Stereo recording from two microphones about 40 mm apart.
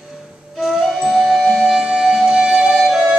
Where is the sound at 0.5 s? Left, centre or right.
Centre.